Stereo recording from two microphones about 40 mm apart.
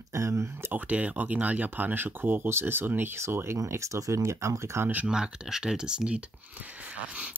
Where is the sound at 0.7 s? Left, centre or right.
Right.